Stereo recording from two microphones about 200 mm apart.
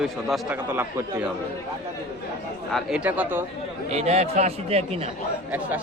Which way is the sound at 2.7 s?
5° right (ahead or behind).